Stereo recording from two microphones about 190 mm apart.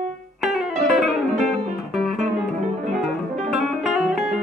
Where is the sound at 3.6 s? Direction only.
Centre (ahead or behind).